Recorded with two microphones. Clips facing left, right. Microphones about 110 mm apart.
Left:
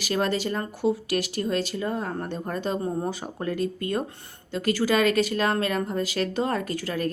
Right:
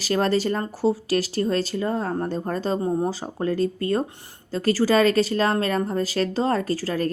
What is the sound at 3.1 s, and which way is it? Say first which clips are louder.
A woman's voice: right 4 dB; 30° right (ahead or behind).